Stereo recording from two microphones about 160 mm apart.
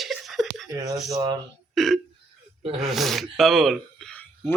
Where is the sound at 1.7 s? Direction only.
Centre (ahead or behind).